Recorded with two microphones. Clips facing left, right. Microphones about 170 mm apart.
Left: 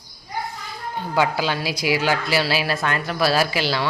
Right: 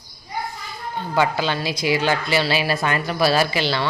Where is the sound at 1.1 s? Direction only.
5° left (ahead or behind).